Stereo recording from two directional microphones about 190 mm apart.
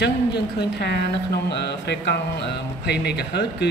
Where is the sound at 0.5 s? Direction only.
60° left (ahead or behind).